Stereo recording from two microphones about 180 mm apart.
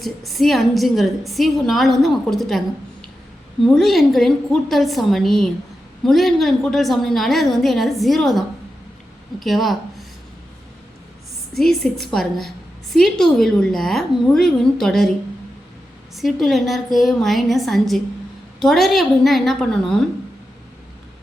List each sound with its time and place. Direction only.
0.0 s a woman's voice: centre (ahead or behind)
3.6 s a woman's voice: centre (ahead or behind)
11.5 s a woman's voice: centre (ahead or behind)
16.1 s a woman's voice: centre (ahead or behind)